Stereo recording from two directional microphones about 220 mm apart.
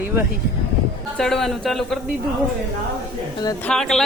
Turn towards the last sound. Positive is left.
turn(degrees=0)  # may be behind; listen again after turning